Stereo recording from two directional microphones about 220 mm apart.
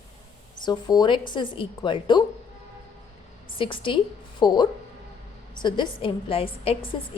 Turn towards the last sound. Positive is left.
turn(degrees=25)  # may be behind; listen again after turning